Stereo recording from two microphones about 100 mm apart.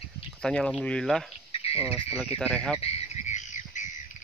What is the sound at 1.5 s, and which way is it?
Cricket, 80° left.